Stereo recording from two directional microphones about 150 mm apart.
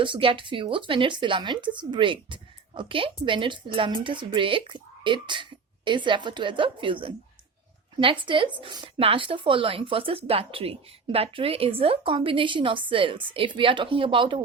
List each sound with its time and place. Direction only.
0.0 s speech: 35° right (ahead or behind)
8.2 s speech: 35° right (ahead or behind)